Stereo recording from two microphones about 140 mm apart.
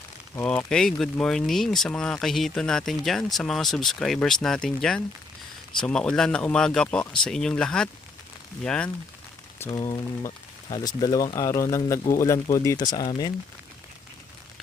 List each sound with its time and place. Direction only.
0.4 s speech: 5° left (ahead or behind)
9.6 s rain on surface: 30° left (ahead or behind)
10.7 s speech: 30° left (ahead or behind)